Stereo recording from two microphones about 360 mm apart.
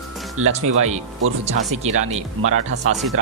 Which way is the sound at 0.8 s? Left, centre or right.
Centre.